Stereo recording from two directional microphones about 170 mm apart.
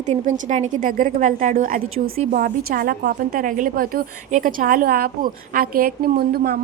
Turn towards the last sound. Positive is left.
turn(degrees=-65)  # may be behind; listen again after turning